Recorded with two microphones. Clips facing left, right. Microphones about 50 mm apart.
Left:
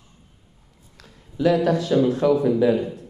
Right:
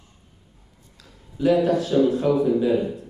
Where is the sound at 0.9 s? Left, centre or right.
Left.